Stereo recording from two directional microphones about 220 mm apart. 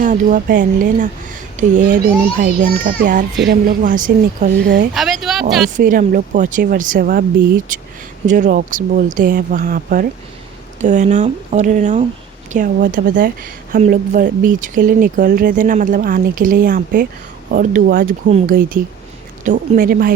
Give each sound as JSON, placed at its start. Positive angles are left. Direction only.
{"t": 0.0, "sound": "a woman's voice", "side_deg": -35}
{"t": 4.9, "sound": "speech", "side_deg": 0}
{"t": 5.7, "sound": "a woman's voice", "side_deg": -40}